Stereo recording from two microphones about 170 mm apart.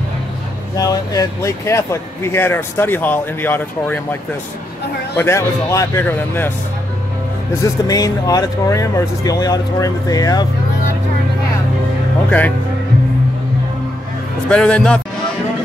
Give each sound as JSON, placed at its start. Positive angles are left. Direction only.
{"t": 0.7, "sound": "speech", "side_deg": 20}
{"t": 7.6, "sound": "speech", "side_deg": 20}
{"t": 12.3, "sound": "speech", "side_deg": 10}
{"t": 14.5, "sound": "speech", "side_deg": 5}